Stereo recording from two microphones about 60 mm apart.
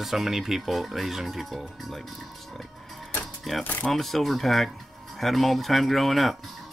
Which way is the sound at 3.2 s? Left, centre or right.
Centre.